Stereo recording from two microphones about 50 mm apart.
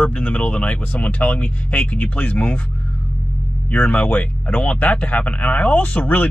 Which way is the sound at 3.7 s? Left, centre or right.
Left.